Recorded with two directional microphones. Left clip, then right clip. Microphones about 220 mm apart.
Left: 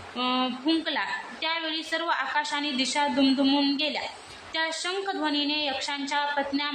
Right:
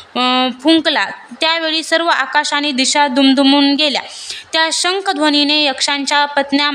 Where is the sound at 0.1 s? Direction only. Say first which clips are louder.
Right 13 dB; 50° right (ahead or behind).